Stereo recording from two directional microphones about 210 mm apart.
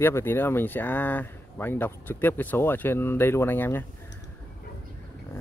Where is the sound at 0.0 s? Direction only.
10° left (ahead or behind).